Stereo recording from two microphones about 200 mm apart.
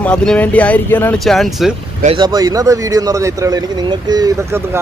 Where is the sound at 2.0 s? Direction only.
25° right (ahead or behind).